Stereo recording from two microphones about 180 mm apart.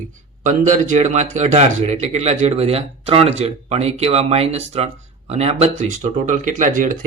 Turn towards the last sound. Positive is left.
turn(degrees=-45)  # may be behind; listen again after turning